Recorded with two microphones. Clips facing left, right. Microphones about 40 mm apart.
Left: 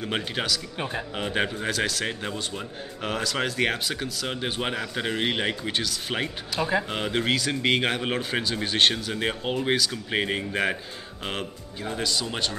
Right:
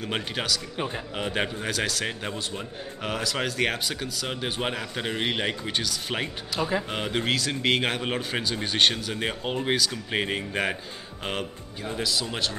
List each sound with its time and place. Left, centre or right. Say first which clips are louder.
0.0 s a man's voice: left 1 dB; centre